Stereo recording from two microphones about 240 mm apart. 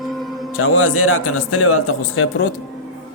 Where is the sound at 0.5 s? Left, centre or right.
Left.